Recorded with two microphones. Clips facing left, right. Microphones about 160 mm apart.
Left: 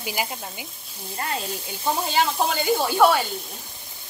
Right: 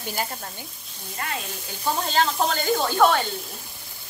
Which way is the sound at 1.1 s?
30° left (ahead or behind).